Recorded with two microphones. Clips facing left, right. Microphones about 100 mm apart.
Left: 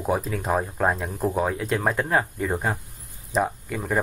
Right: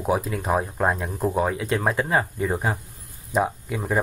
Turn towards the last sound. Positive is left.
turn(degrees=-15)  # may be behind; listen again after turning